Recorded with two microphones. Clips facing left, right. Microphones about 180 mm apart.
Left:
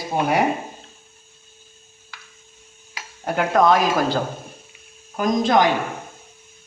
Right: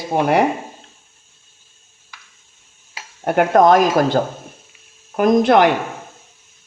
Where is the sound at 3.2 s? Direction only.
55° right (ahead or behind).